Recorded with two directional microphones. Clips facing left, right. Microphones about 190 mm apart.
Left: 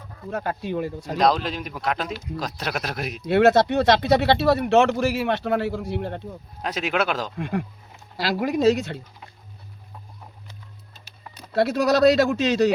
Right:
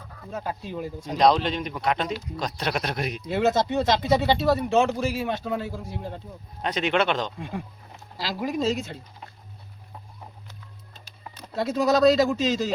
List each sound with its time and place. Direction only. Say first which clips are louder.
0.3 s speech: left 5 dB; 65° left (ahead or behind)
1.1 s speech: right 1 dB; centre (ahead or behind)
3.2 s speech: left 7 dB; 70° left (ahead or behind)
6.6 s speech: right 1 dB; 5° left (ahead or behind)
7.3 s speech: left 7 dB; 70° left (ahead or behind)
11.5 s speech: left 2 dB; 70° left (ahead or behind)